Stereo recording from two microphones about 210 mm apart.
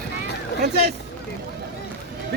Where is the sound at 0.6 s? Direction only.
50° right (ahead or behind).